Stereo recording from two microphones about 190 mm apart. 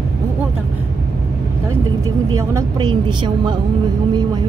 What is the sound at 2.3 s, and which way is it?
Vehicle, 15° right (ahead or behind).